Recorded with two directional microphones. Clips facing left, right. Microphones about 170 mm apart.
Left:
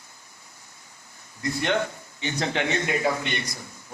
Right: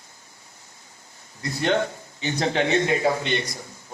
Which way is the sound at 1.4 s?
35° right (ahead or behind).